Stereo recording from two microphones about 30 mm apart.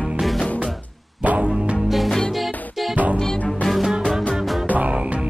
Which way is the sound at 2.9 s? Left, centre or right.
Right.